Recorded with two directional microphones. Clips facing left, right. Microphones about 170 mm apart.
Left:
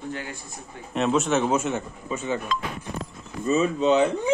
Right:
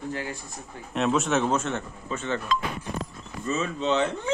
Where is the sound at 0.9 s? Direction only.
Centre (ahead or behind).